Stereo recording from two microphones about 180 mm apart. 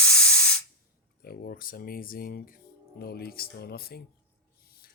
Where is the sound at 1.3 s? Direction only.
55° left (ahead or behind).